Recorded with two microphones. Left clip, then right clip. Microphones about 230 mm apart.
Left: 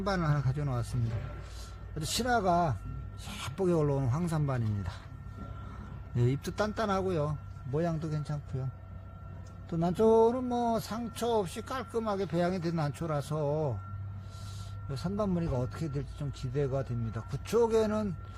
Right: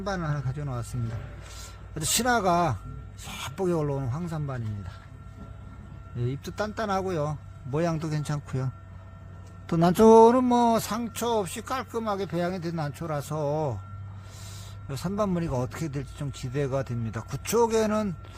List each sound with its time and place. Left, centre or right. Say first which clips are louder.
0.0 s speech: right 1 dB; centre
2.0 s speech: right 5 dB; right; by 4.9 s centre
6.1 s speech: left 2 dB; centre
6.6 s speech: right 3 dB; centre
7.7 s speech: right 5 dB; right
14.8 s speech: right 5 dB; right